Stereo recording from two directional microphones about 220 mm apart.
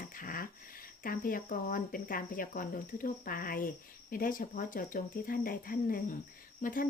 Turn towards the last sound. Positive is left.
turn(degrees=40)  # may be behind; listen again after turning